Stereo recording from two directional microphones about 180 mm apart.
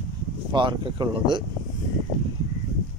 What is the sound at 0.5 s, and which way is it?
Speech, 25° right (ahead or behind).